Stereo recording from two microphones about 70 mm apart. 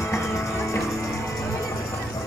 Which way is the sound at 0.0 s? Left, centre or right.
Left.